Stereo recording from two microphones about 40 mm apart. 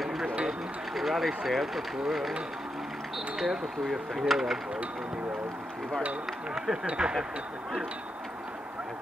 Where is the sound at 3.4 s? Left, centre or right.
Centre.